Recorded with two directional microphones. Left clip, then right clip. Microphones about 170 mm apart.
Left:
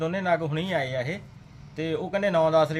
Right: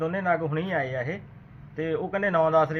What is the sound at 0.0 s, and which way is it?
Speech, centre (ahead or behind).